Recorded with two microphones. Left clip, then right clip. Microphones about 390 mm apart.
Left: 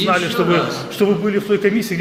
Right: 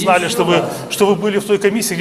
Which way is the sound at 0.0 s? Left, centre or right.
Right.